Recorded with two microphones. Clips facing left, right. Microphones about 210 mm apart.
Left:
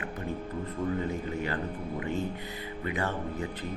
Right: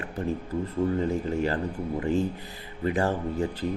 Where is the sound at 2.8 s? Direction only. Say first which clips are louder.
Right 7 dB; 35° right (ahead or behind).